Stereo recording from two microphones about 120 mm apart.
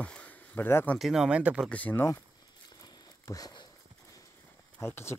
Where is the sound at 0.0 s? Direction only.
10° left (ahead or behind).